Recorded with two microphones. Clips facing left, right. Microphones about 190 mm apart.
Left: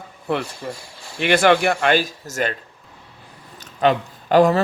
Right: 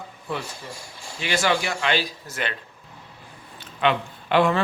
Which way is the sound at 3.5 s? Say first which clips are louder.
Left 4 dB; 40° left (ahead or behind).